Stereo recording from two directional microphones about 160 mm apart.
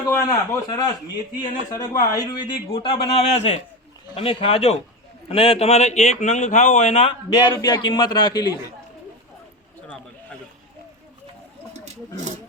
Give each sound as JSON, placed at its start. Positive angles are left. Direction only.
{"t": 0.1, "sound": "a man's voice", "side_deg": 20}
{"t": 7.3, "sound": "a man's voice", "side_deg": 25}
{"t": 11.7, "sound": "a sound", "side_deg": -45}